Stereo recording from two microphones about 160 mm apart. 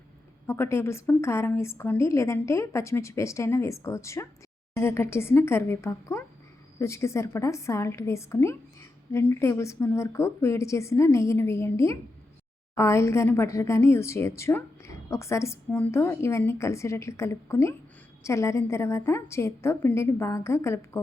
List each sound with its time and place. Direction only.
0.4 s speech: 15° left (ahead or behind)